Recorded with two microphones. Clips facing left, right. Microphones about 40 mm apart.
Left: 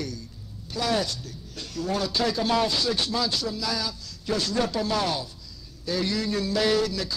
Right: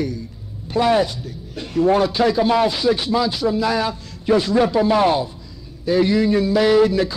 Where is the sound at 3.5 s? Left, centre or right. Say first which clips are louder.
Right 10 dB; right.